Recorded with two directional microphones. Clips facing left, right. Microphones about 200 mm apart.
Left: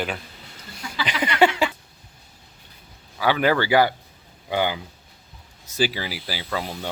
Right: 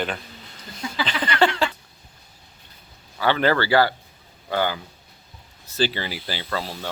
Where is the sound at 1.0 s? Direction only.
10° left (ahead or behind).